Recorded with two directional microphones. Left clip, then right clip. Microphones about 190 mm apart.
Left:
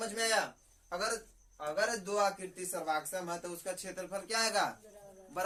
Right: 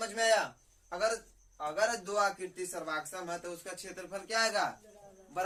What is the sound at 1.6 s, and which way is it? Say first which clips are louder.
A man's voice: right 2 dB; 20° left (ahead or behind).